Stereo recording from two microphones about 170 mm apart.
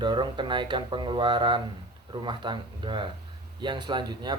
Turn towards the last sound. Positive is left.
turn(degrees=-25)  # may be behind; listen again after turning